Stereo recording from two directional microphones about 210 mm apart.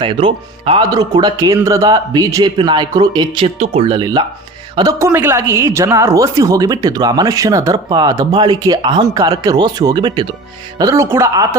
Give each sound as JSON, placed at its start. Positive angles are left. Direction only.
{"t": 0.0, "sound": "speech", "side_deg": -25}